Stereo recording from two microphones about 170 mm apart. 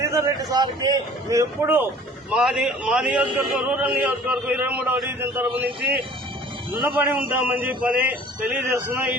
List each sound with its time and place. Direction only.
0.1 s a man's voice: 20° right (ahead or behind)
6.8 s a man's voice: 10° right (ahead or behind)